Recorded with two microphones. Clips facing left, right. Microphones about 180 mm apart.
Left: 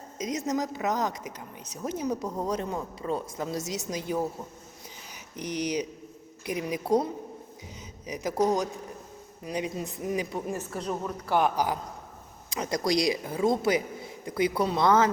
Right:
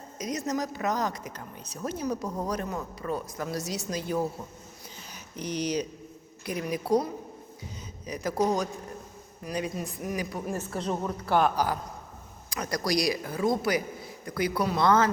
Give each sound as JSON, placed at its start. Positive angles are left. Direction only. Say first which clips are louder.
{"t": 0.2, "sound": "speech", "louder": "left 1 dB", "side_deg": 20}